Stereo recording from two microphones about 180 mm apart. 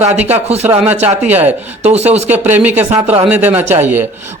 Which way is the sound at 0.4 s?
35° right (ahead or behind).